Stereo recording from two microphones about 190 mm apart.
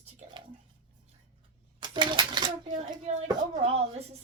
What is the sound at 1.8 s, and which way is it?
Coin, 25° right (ahead or behind).